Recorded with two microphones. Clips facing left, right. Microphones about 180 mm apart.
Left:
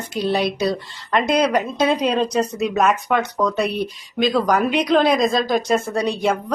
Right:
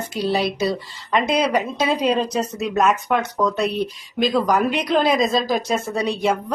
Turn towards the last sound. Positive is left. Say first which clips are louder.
# left 1 dB
turn(degrees=0)  # may be behind; listen again after turning